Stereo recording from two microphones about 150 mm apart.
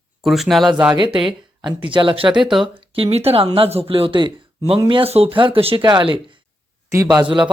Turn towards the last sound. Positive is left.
turn(degrees=-30)  # may be behind; listen again after turning